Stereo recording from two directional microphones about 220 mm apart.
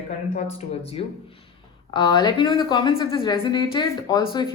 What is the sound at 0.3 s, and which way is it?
Speech, 25° left (ahead or behind).